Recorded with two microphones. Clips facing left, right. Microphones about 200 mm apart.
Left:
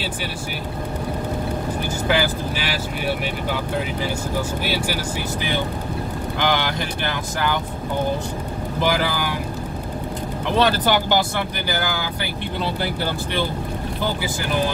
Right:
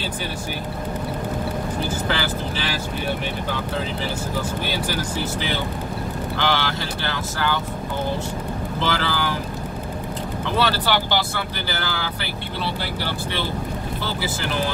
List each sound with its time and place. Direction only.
2.0 s speech: 15° left (ahead or behind)
6.3 s speech: 15° left (ahead or behind)
8.8 s speech: 15° left (ahead or behind)
10.6 s speech: 15° left (ahead or behind)